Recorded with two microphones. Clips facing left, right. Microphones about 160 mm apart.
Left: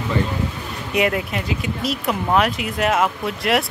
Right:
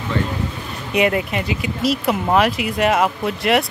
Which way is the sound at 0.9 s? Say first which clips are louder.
Right 2 dB; centre (ahead or behind).